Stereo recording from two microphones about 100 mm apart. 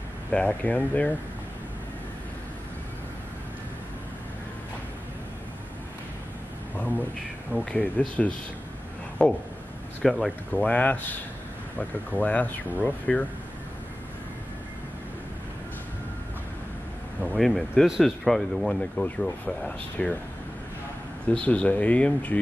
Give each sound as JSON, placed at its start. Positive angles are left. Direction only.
{"t": 0.3, "sound": "speech", "side_deg": 10}
{"t": 6.8, "sound": "speech", "side_deg": 15}
{"t": 9.2, "sound": "speech", "side_deg": 10}
{"t": 10.0, "sound": "speech", "side_deg": 0}
{"t": 10.5, "sound": "speech", "side_deg": 15}
{"t": 17.3, "sound": "speech", "side_deg": 0}
{"t": 21.3, "sound": "speech", "side_deg": 10}